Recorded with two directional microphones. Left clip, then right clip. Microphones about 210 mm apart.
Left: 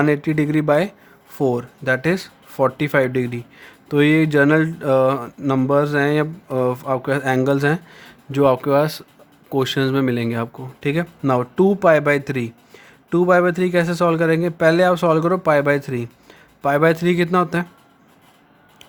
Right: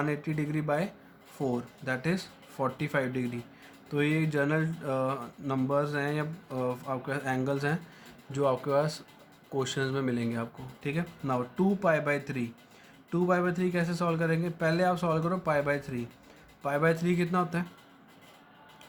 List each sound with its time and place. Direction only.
0.0 s speech: 50° left (ahead or behind)